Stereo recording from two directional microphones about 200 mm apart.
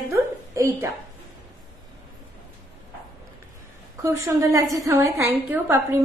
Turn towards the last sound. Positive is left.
turn(degrees=-10)  # may be behind; listen again after turning